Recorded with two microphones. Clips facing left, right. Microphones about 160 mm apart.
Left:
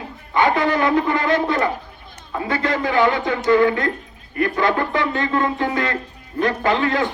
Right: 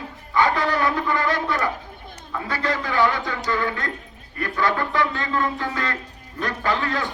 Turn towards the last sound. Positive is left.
turn(degrees=20)  # may be behind; listen again after turning